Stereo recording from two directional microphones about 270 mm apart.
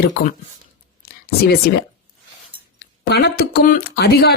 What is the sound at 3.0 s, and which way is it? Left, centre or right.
Speech, left.